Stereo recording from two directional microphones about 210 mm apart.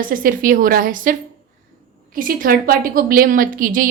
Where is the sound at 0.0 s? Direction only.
40° right (ahead or behind).